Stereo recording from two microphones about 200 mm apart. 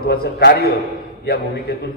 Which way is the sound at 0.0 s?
50° left (ahead or behind).